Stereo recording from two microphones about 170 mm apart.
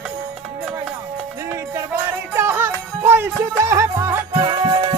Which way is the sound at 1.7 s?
15° right (ahead or behind).